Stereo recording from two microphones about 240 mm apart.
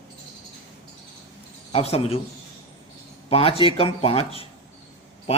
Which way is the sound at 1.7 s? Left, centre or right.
Left.